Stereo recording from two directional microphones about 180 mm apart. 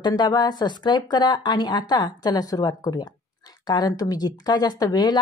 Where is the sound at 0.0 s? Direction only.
25° left (ahead or behind).